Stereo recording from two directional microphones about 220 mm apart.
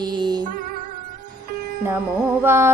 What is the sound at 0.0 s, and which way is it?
Music, 20° right (ahead or behind).